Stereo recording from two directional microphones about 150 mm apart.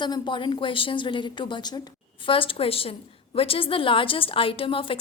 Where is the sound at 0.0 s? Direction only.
30° left (ahead or behind).